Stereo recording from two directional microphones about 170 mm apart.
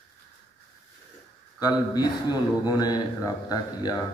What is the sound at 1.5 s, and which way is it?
Speech, 25° left (ahead or behind).